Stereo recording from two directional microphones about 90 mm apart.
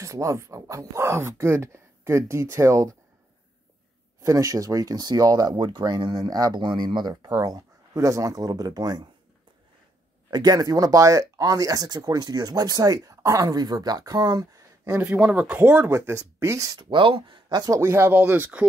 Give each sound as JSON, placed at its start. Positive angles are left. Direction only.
{"t": 0.0, "sound": "speech", "side_deg": -35}
{"t": 4.2, "sound": "speech", "side_deg": -40}
{"t": 10.3, "sound": "speech", "side_deg": -50}
{"t": 15.0, "sound": "speech", "side_deg": -15}
{"t": 16.9, "sound": "speech", "side_deg": -70}
{"t": 17.5, "sound": "speech", "side_deg": -45}